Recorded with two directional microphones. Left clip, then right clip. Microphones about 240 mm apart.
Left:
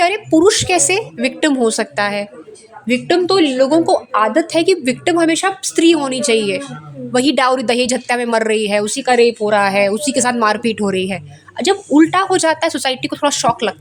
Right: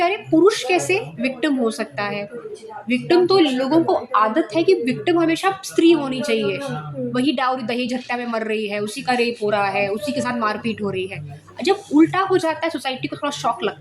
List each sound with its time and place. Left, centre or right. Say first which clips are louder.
0.0 s a woman's voice: left 4 dB; left